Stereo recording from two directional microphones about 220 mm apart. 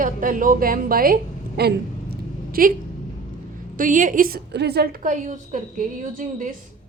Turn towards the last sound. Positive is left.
turn(degrees=-35)  # may be behind; listen again after turning